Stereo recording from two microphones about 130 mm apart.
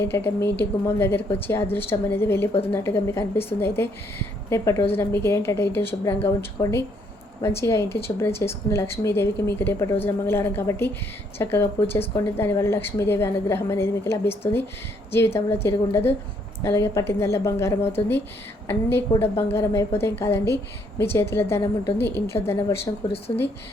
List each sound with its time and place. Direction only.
0.0 s a woman's voice: 20° left (ahead or behind)
2.5 s speech: 50° left (ahead or behind)
2.7 s a woman's voice: 20° left (ahead or behind)
23.1 s speech: 50° left (ahead or behind)